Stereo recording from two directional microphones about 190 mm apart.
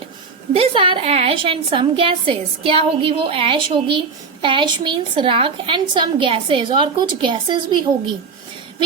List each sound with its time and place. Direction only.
0.5 s a woman's voice: 30° right (ahead or behind)